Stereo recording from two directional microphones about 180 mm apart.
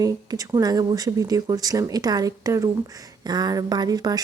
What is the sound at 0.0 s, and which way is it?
Speech, 20° right (ahead or behind).